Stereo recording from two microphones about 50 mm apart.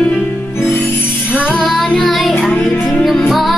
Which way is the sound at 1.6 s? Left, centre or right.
Centre.